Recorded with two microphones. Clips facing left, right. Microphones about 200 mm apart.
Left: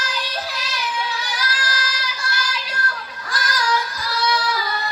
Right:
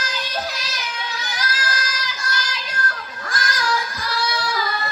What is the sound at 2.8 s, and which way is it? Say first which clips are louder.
Child singing: right 1 dB; 45° right (ahead or behind).